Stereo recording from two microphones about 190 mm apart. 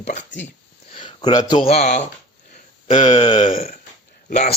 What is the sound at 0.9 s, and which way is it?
A man's voice, 25° left (ahead or behind).